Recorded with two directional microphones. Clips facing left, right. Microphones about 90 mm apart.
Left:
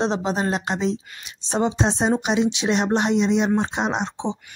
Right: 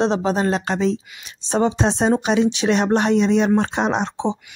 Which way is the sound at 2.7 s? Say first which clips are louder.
Right 3 dB; 50° right (ahead or behind).